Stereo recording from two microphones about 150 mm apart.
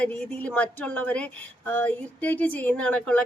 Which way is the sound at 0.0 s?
10° left (ahead or behind).